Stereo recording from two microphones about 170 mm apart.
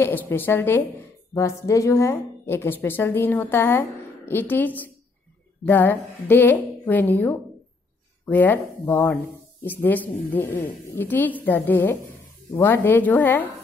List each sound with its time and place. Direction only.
0.3 s speech: 15° left (ahead or behind)